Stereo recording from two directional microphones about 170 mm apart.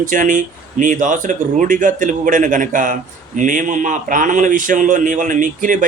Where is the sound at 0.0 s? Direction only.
50° right (ahead or behind).